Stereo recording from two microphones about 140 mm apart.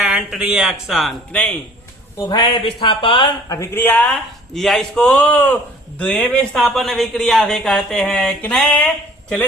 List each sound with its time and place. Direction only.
0.0 s speech: 5° right (ahead or behind)
2.3 s speech: 35° left (ahead or behind)
3.5 s speech: 20° left (ahead or behind)
4.5 s speech: centre (ahead or behind)